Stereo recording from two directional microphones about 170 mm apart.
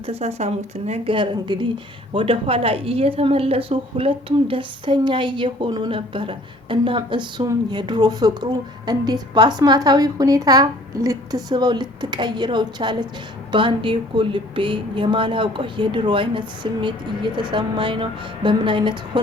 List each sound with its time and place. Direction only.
0.0 s a woman's voice: 35° right (ahead or behind)